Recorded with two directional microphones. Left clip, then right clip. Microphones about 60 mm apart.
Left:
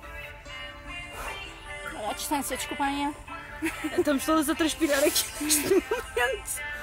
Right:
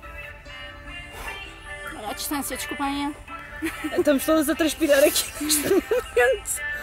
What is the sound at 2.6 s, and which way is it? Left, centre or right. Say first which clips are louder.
Speech: right 3 dB; left.